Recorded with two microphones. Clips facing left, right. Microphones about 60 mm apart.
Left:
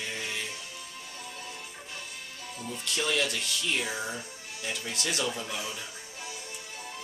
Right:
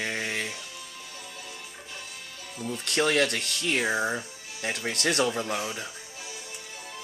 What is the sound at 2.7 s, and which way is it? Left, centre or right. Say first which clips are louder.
Speech: right 6 dB; right.